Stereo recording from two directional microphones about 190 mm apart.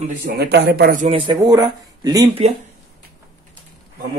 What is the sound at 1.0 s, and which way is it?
Speech, 25° right (ahead or behind).